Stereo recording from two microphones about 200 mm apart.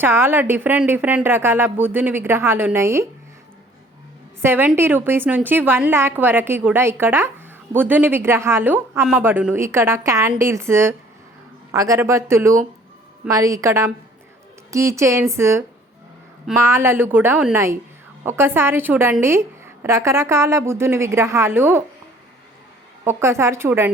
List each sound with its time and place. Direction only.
0.0 s a woman's voice: 10° right (ahead or behind)
4.4 s a woman's voice: 10° right (ahead or behind)
23.0 s a woman's voice: 15° right (ahead or behind)